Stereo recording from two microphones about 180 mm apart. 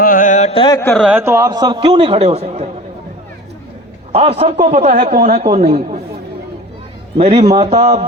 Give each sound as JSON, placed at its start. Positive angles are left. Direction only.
{"t": 0.0, "sound": "carnatic music", "side_deg": 50}
{"t": 0.8, "sound": "speech", "side_deg": 10}
{"t": 1.0, "sound": "a man's voice", "side_deg": -10}
{"t": 4.1, "sound": "a man's voice", "side_deg": -35}
{"t": 7.2, "sound": "a man's voice", "side_deg": -35}